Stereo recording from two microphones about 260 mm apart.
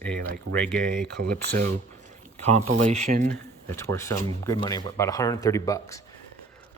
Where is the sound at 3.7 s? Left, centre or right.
Centre.